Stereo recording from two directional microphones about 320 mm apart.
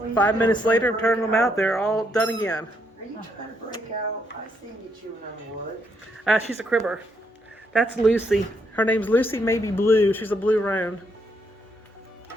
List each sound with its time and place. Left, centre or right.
0.1 s speech: centre
6.2 s speech: centre